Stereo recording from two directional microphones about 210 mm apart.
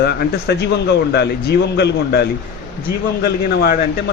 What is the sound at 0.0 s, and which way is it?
Speech, 50° left (ahead or behind).